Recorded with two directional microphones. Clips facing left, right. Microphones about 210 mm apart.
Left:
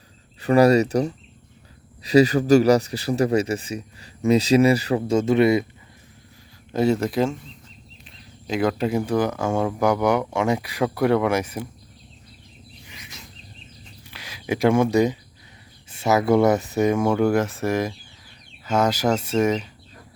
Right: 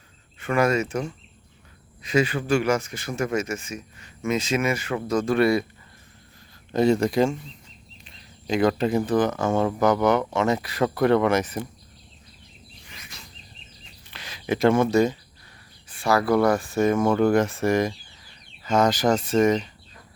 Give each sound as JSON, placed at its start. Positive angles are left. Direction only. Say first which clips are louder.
{"t": 0.3, "sound": "speech", "louder": "left 6 dB", "side_deg": 35}
{"t": 6.7, "sound": "speech", "louder": "right 1 dB", "side_deg": 5}
{"t": 12.9, "sound": "a sound", "louder": "left 1 dB", "side_deg": 15}
{"t": 14.1, "sound": "speech", "louder": "even", "side_deg": 10}